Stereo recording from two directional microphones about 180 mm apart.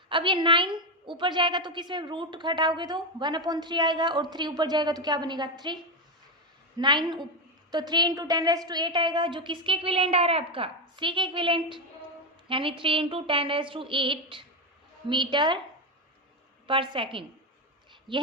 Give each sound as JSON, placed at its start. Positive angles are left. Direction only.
{"t": 0.1, "sound": "a woman's voice", "side_deg": -25}
{"t": 6.7, "sound": "a woman's voice", "side_deg": -25}
{"t": 16.6, "sound": "a woman's voice", "side_deg": -30}